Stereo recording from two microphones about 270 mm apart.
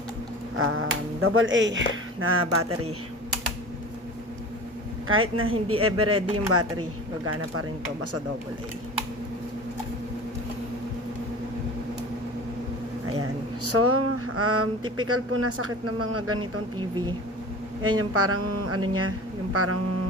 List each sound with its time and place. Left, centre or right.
0.5 s speech: right
5.0 s speech: right
13.7 s speech: right
17.8 s speech: right